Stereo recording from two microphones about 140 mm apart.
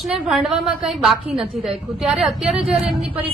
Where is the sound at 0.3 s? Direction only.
5° right (ahead or behind).